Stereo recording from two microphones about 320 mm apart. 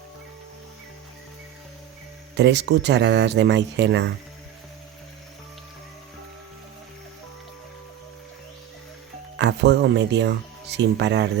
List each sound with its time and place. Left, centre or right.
2.3 s speech: right
9.4 s speech: right